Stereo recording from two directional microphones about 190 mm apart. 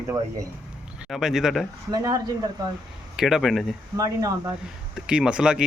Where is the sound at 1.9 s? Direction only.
20° right (ahead or behind).